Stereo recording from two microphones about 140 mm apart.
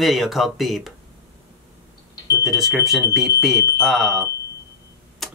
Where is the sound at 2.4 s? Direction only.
Centre (ahead or behind).